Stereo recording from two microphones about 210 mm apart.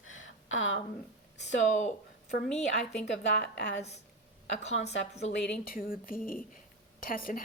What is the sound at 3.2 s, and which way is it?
Speech, 55° left (ahead or behind).